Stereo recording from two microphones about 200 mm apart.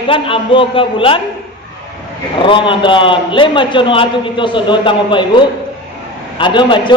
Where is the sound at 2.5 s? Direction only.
25° left (ahead or behind).